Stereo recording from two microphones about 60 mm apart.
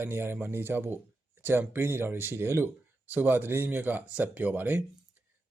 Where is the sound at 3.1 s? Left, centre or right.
Right.